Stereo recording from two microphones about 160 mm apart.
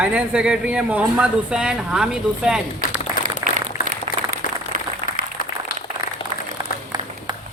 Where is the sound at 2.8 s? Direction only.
60° left (ahead or behind).